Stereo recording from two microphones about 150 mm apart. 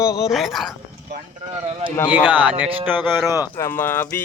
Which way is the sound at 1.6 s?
45° right (ahead or behind).